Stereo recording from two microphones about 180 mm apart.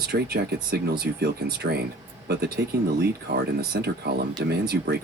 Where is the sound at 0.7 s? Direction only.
60° right (ahead or behind).